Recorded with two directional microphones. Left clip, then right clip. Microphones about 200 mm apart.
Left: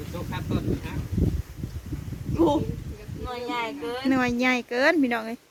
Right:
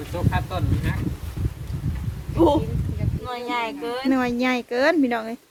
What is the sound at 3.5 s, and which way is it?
Speech, 15° left (ahead or behind).